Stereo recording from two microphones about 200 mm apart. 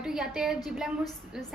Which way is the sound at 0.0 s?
5° right (ahead or behind).